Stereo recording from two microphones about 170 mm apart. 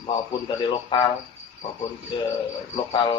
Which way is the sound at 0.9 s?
25° left (ahead or behind).